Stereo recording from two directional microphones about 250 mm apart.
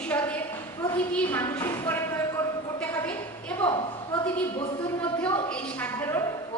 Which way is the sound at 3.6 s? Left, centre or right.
Centre.